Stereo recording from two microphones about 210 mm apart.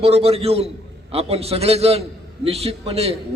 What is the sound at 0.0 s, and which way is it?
A man's voice, 30° right (ahead or behind).